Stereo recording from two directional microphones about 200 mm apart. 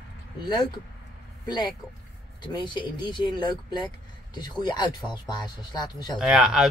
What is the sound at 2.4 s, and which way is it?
Speech, 20° left (ahead or behind).